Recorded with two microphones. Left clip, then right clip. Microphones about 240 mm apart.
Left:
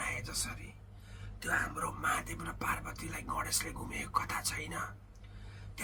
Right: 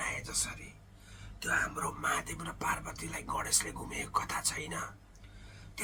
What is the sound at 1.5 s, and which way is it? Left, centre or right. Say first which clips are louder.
Speech: right 2 dB; centre.